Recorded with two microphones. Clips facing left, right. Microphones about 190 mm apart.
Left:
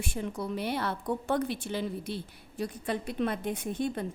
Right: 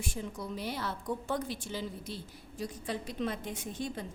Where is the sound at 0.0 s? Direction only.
65° left (ahead or behind).